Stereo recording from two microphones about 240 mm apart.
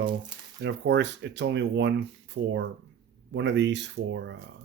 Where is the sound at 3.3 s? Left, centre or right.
Right.